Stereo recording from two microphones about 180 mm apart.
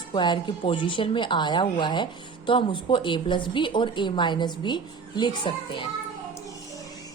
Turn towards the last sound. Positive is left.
turn(degrees=25)  # may be behind; listen again after turning